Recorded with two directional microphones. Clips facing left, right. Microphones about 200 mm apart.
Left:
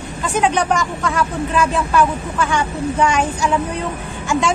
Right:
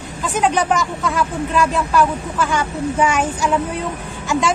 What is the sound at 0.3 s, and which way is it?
A woman's voice, centre (ahead or behind).